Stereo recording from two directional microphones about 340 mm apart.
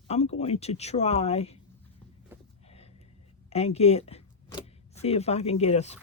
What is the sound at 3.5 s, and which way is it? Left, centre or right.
Speech, centre.